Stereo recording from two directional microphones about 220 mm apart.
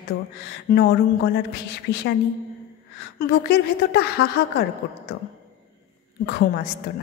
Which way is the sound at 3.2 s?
45° left (ahead or behind).